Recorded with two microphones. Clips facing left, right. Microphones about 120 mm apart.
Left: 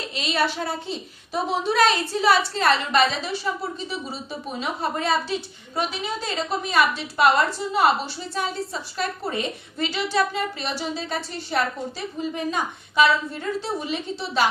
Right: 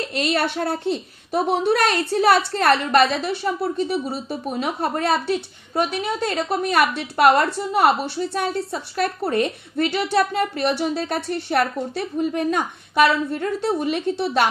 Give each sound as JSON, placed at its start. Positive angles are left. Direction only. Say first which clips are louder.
{"t": 0.1, "sound": "a woman's voice", "louder": "right 1 dB", "side_deg": -60}